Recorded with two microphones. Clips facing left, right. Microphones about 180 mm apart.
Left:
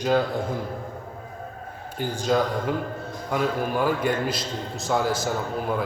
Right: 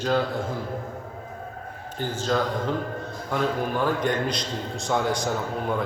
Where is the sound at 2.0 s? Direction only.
10° left (ahead or behind).